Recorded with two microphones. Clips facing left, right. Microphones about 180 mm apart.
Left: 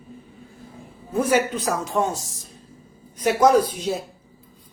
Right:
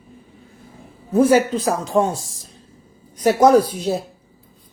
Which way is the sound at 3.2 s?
35° right (ahead or behind).